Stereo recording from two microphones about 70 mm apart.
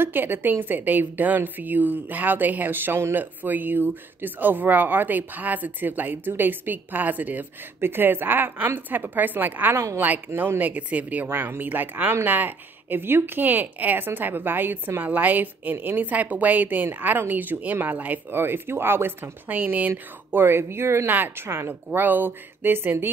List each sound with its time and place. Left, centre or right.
0.0 s a woman's voice: right